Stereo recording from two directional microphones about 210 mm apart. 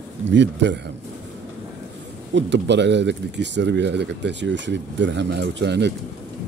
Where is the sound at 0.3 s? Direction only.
55° right (ahead or behind).